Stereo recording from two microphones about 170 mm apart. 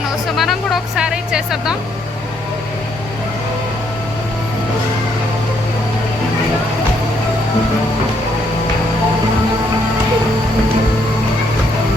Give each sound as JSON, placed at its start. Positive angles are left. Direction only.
{"t": 0.3, "sound": "music", "side_deg": 0}